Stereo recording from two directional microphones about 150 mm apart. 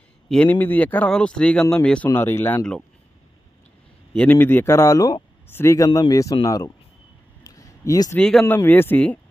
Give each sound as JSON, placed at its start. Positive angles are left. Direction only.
{"t": 0.3, "sound": "a man's voice", "side_deg": 10}
{"t": 4.1, "sound": "a man's voice", "side_deg": 10}
{"t": 7.4, "sound": "a sound", "side_deg": 25}
{"t": 8.2, "sound": "a man's voice", "side_deg": 5}